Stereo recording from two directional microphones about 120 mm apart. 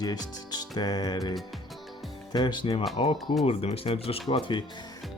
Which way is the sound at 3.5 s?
55° left (ahead or behind).